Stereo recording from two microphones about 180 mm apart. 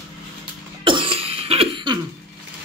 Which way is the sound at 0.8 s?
30° right (ahead or behind).